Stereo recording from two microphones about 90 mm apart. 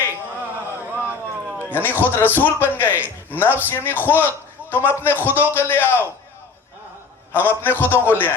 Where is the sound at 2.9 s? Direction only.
20° right (ahead or behind).